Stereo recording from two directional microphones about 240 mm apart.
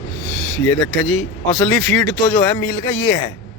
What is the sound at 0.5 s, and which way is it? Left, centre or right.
Speech, centre.